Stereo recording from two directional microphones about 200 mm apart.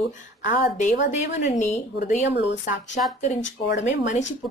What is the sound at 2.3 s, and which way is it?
Speech, 60° left (ahead or behind).